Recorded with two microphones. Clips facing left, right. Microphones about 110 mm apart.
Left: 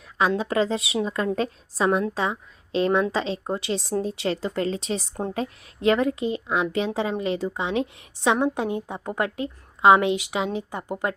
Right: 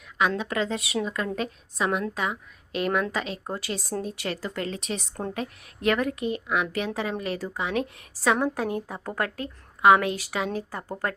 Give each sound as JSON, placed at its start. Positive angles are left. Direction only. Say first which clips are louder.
{"t": 0.2, "sound": "a woman's voice", "louder": "left 4 dB", "side_deg": 30}